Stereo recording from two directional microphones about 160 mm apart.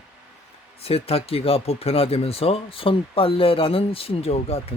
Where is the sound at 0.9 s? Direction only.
40° left (ahead or behind).